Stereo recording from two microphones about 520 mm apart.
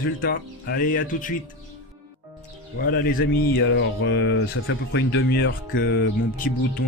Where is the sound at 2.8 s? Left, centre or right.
Centre.